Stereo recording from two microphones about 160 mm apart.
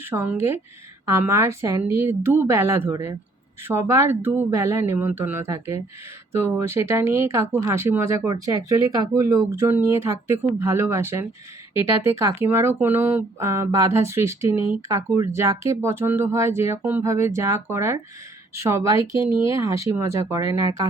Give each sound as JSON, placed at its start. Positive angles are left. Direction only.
{"t": 0.0, "sound": "speech", "side_deg": -15}